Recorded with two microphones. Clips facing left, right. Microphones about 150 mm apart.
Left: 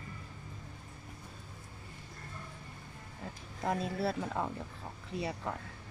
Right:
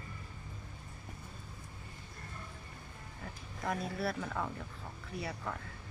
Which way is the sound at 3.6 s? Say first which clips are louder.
Left 3 dB; 20° left (ahead or behind).